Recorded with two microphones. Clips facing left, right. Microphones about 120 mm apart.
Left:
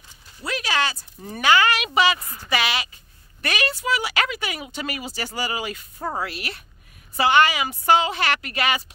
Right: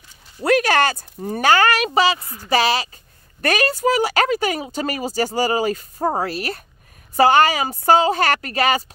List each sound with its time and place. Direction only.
0.4 s speech: 55° right (ahead or behind)
1.9 s speech: 35° right (ahead or behind)